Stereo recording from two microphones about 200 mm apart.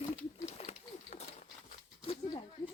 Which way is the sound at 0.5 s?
35° left (ahead or behind).